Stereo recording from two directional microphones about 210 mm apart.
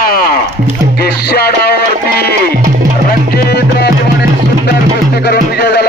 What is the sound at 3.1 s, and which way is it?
Music, 50° left (ahead or behind).